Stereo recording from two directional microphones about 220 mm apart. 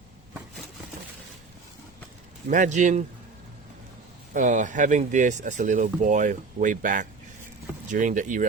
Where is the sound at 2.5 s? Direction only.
35° right (ahead or behind).